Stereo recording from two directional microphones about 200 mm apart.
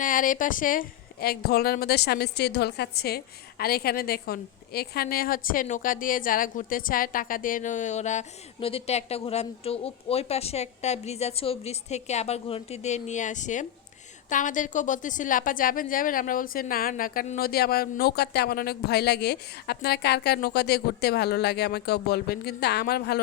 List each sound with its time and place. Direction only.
0.0 s a woman's voice: 40° left (ahead or behind)